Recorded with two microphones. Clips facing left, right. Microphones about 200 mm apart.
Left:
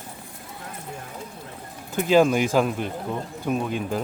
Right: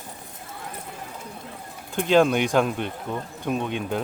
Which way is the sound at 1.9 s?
5° left (ahead or behind).